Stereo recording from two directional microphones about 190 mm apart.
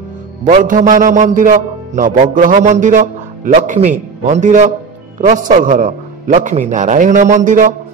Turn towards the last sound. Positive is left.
turn(degrees=-45)  # may be behind; listen again after turning